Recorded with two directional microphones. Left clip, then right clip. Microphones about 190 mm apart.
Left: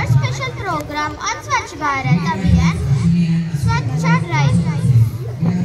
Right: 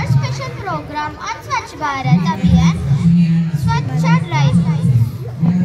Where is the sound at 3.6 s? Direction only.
45° right (ahead or behind).